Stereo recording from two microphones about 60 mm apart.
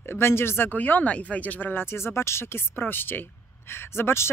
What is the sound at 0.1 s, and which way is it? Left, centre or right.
Speech, left.